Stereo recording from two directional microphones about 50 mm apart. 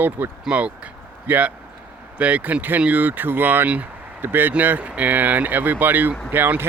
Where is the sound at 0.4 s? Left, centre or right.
Right.